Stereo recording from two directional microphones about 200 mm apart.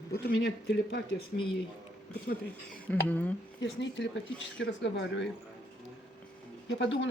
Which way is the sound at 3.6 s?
65° left (ahead or behind).